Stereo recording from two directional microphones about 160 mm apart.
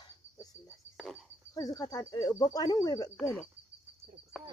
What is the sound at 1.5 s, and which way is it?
Speech, 20° left (ahead or behind).